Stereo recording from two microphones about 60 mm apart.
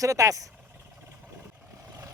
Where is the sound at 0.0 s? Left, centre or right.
Right.